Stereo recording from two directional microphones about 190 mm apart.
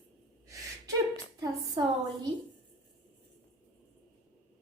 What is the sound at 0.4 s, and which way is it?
Gasp, 15° right (ahead or behind).